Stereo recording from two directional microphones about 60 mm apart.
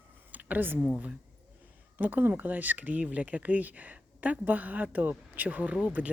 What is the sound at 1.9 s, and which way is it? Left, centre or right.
Speech, right.